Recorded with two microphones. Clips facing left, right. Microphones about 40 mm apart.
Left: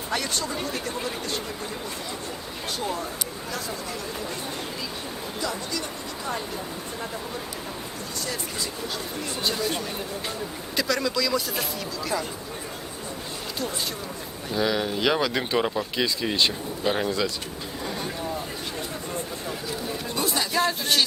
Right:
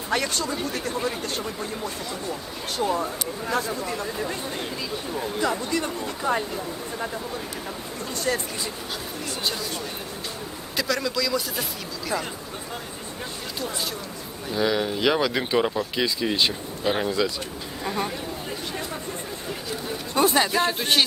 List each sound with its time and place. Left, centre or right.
0.1 s speech: right
2.7 s speech: right
5.4 s speech: right
10.8 s speech: centre
14.5 s speech: centre
17.8 s a sound: right
20.2 s a sound: right
20.6 s speech: right